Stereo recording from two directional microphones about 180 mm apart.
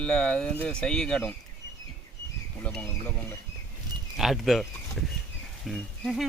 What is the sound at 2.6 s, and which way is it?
Speech, 5° left (ahead or behind).